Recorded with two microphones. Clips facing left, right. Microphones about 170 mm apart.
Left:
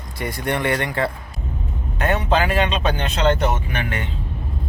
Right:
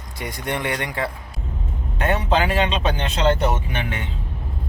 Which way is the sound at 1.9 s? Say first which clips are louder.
Left 1 dB; 25° right (ahead or behind).